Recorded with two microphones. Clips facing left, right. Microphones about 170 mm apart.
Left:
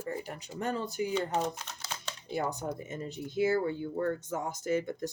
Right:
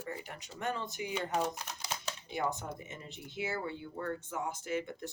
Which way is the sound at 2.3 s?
35° left (ahead or behind).